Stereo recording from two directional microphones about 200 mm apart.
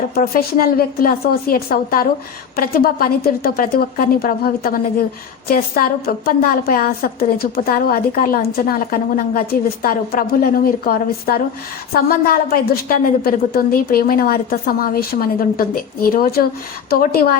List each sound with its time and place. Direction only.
0.1 s a woman's voice: 50° left (ahead or behind)